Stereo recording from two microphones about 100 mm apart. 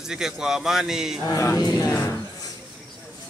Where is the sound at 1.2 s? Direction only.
35° left (ahead or behind).